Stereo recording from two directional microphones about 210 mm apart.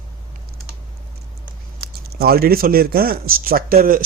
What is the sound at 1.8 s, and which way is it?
Speech, 50° right (ahead or behind).